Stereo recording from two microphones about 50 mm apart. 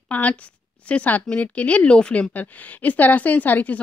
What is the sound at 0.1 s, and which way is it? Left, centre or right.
A woman's voice, left.